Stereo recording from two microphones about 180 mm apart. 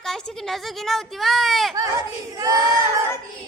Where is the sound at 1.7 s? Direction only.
20° right (ahead or behind).